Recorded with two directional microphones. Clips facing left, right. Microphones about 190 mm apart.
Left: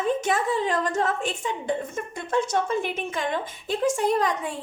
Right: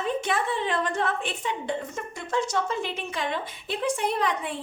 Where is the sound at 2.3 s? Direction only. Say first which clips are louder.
Left 3 dB; 55° left (ahead or behind).